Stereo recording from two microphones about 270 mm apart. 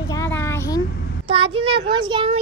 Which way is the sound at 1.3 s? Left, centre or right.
Centre.